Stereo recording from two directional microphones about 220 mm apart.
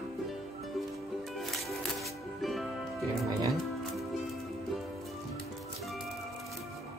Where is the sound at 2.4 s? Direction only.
Centre (ahead or behind).